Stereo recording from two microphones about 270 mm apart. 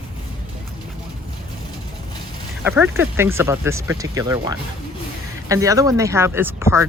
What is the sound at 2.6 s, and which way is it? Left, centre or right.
Speech, centre.